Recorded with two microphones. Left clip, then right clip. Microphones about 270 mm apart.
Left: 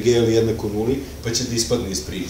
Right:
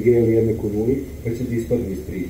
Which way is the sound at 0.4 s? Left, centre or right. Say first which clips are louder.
Even; left.